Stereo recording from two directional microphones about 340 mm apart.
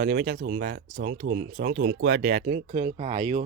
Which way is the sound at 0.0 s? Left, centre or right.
Right.